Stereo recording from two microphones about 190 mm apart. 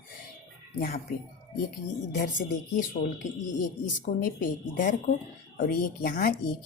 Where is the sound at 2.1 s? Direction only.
70° left (ahead or behind).